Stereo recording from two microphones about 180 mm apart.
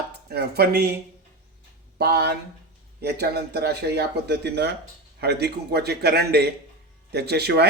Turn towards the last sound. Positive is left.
turn(degrees=-65)  # may be behind; listen again after turning